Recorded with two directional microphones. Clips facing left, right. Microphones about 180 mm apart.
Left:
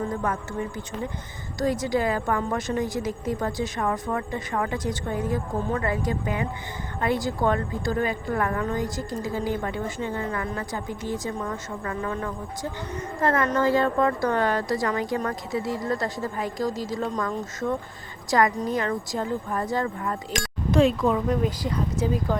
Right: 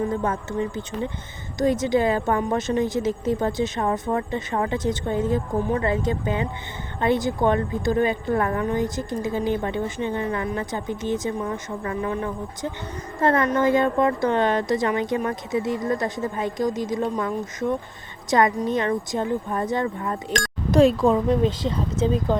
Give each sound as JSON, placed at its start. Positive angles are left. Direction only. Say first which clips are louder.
{"t": 0.2, "sound": "a woman's voice", "louder": "right 3 dB", "side_deg": -25}
{"t": 13.4, "sound": "a woman's voice", "louder": "right 2 dB", "side_deg": -15}
{"t": 20.7, "sound": "a woman's voice", "louder": "right 4 dB", "side_deg": -40}